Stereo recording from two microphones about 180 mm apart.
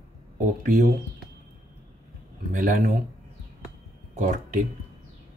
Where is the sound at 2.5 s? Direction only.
45° right (ahead or behind).